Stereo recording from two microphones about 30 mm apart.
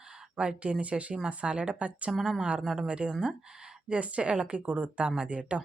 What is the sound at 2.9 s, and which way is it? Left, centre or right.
A woman's voice, right.